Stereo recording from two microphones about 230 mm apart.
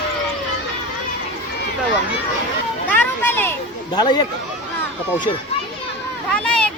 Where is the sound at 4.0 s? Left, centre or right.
Centre.